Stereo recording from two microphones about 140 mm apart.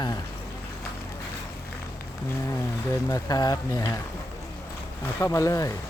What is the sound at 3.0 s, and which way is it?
Speech, 25° left (ahead or behind).